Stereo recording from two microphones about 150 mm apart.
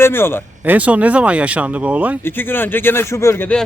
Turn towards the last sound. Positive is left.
turn(degrees=10)  # may be behind; listen again after turning